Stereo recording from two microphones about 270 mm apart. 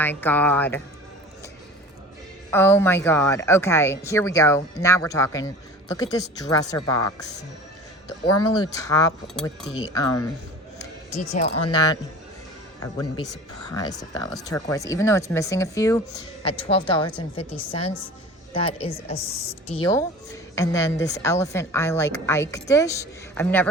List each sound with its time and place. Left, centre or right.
0.0 s speech: centre
2.5 s speech: centre
8.5 s speech: centre
9.2 s speech: centre
9.8 s speech: centre
11.1 s speech: left
11.6 s speech: centre